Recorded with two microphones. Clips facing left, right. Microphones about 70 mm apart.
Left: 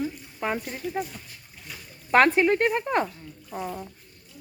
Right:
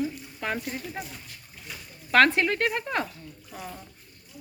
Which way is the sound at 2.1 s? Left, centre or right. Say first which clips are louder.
Left 2 dB; left.